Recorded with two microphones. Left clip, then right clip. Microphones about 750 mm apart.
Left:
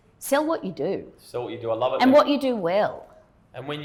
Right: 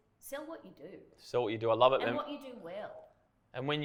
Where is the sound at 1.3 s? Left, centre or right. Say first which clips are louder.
Left 3 dB; right.